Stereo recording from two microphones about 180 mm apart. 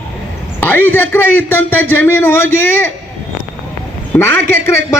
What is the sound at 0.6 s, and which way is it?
A man's voice, 10° left (ahead or behind).